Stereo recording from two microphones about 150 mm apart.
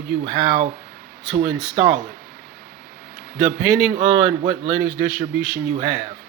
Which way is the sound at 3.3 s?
Centre (ahead or behind).